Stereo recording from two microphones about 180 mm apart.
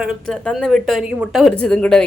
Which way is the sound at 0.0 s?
5° right (ahead or behind).